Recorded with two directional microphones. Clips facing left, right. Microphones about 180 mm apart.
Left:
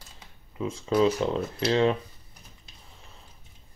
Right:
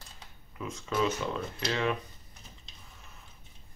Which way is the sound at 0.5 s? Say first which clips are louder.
Left 7 dB; 30° left (ahead or behind).